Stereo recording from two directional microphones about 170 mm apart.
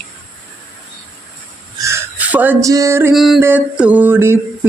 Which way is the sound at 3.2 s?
Centre (ahead or behind).